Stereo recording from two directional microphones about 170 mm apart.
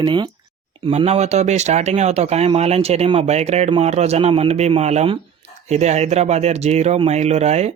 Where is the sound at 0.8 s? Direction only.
40° right (ahead or behind).